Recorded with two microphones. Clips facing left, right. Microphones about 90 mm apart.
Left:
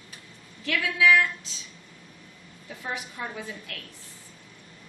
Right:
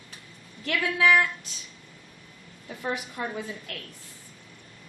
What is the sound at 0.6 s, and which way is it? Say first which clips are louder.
Speech: even; 50° right (ahead or behind).